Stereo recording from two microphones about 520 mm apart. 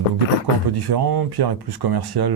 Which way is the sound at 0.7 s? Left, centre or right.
Right.